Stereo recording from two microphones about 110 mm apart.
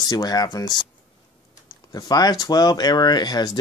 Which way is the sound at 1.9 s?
35° left (ahead or behind).